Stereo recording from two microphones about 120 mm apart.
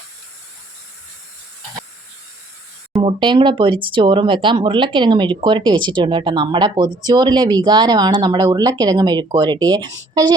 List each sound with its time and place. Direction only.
3.0 s speech: 45° right (ahead or behind)